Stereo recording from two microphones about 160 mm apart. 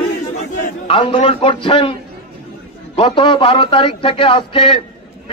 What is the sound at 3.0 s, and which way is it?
A man's voice, 30° left (ahead or behind).